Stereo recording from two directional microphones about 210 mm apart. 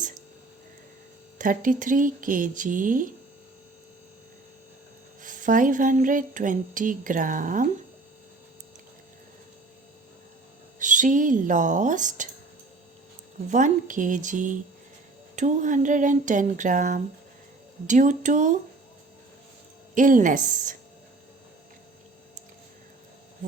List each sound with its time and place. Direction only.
1.4 s speech: 40° right (ahead or behind)
5.2 s speech: 40° right (ahead or behind)
10.8 s speech: 35° right (ahead or behind)
13.5 s speech: 40° right (ahead or behind)
19.9 s speech: 40° right (ahead or behind)